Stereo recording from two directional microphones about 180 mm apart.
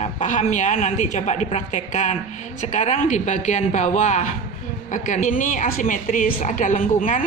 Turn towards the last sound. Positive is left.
turn(degrees=50)  # may be behind; listen again after turning